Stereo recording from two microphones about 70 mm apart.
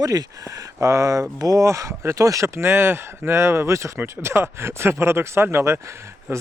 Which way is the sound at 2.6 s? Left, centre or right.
Right.